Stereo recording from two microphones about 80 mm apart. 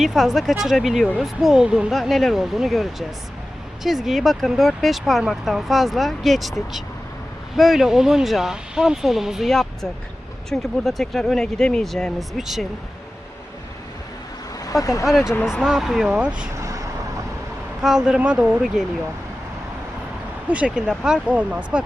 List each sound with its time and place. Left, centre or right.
0.0 s speech: centre
14.6 s speech: left
15.0 s speech: centre
16.0 s speech: centre
16.6 s vehicle: right
17.8 s speech: centre
20.5 s speech: centre